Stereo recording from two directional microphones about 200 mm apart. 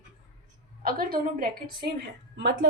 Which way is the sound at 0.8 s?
45° right (ahead or behind).